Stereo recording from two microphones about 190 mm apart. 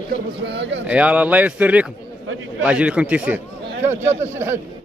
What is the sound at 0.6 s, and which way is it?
Speech, 65° right (ahead or behind).